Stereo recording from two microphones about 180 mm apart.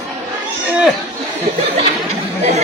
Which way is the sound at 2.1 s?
35° right (ahead or behind).